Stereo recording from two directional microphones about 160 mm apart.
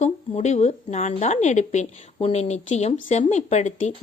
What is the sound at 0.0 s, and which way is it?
Speech, 45° left (ahead or behind).